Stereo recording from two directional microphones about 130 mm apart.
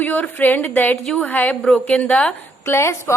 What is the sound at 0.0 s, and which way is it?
A woman's voice, 15° left (ahead or behind).